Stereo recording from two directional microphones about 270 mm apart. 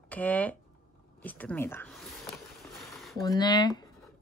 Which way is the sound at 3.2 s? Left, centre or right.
Centre.